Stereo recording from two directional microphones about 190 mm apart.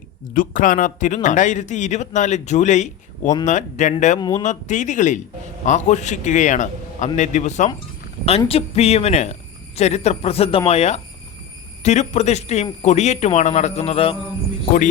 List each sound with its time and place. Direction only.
0.3 s speech: 45° left (ahead or behind)
4.2 s speech: 20° left (ahead or behind)
4.4 s speech: 40° left (ahead or behind)